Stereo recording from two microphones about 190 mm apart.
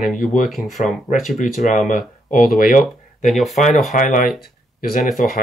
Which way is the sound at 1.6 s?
40° left (ahead or behind).